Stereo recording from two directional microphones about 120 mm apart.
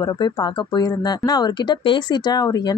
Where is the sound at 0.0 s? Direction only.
35° left (ahead or behind).